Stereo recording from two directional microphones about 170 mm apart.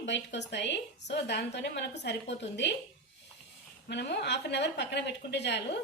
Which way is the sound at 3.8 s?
80° left.